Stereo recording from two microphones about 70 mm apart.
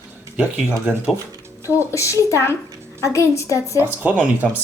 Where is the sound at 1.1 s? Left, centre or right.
Right.